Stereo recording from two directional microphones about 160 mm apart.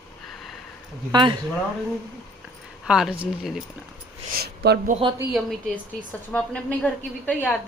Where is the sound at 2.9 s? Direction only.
5° right (ahead or behind).